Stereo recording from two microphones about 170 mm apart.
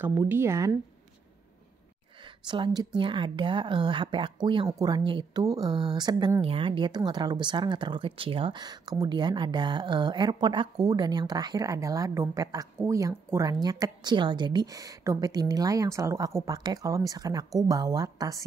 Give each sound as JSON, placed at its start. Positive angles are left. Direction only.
{"t": 0.0, "sound": "speech", "side_deg": -10}
{"t": 2.2, "sound": "speech", "side_deg": -30}